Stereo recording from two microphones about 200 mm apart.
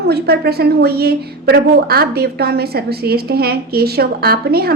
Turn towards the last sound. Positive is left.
turn(degrees=-50)  # may be behind; listen again after turning